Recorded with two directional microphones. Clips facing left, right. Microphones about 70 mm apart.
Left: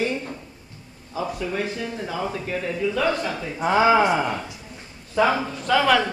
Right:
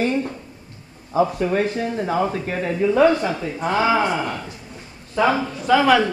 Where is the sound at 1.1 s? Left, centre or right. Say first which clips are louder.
Right 8 dB; right.